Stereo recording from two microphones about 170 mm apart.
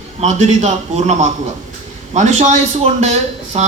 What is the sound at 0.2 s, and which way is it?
A man's voice, 40° right (ahead or behind).